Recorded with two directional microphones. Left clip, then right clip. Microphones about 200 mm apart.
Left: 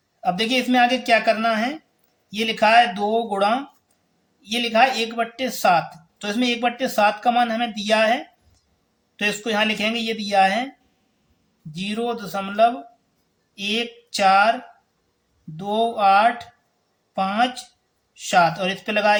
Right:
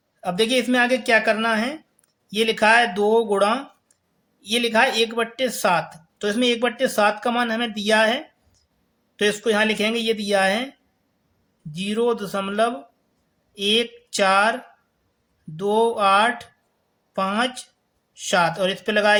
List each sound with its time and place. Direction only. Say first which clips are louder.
0.2 s speech: even; 30° right (ahead or behind)
11.7 s speech: right 4 dB; 30° right (ahead or behind)
15.5 s speech: right 2 dB; 35° right (ahead or behind)